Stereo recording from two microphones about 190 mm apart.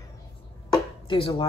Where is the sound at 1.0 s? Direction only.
25° left (ahead or behind).